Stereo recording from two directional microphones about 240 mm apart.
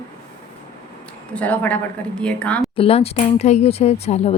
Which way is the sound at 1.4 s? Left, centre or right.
Centre.